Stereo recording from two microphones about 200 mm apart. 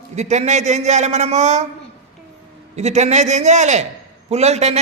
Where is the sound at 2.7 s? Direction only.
35° right (ahead or behind).